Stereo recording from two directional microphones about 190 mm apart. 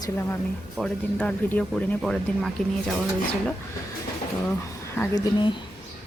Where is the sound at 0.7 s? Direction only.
5° left (ahead or behind).